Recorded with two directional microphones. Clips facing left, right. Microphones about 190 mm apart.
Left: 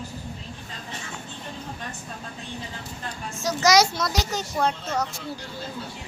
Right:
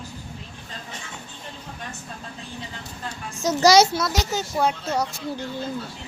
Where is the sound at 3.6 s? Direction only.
30° right (ahead or behind).